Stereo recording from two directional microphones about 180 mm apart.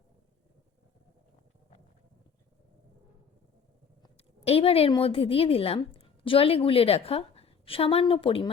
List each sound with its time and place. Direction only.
4.4 s a woman's voice: 35° left (ahead or behind)